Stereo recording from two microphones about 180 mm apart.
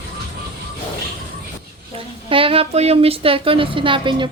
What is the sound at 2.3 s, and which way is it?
Speech, 30° right (ahead or behind).